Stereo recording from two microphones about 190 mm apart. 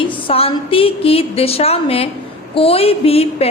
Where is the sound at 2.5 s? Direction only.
30° left (ahead or behind).